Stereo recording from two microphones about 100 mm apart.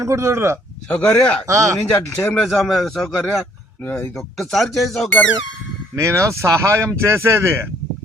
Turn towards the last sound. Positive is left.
turn(degrees=-25)  # may be behind; listen again after turning